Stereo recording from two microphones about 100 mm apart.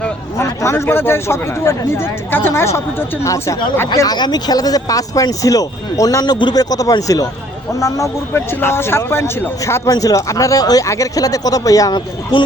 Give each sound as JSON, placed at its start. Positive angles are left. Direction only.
{"t": 0.3, "sound": "speech", "side_deg": 25}
{"t": 3.9, "sound": "speech", "side_deg": 40}